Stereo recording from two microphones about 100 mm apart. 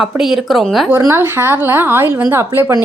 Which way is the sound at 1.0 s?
25° right (ahead or behind).